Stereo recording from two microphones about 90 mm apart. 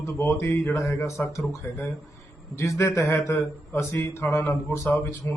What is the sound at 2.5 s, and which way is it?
A man's voice, 35° left (ahead or behind).